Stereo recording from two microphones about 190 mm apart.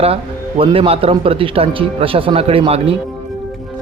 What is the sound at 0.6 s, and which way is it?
Speech, 30° right (ahead or behind).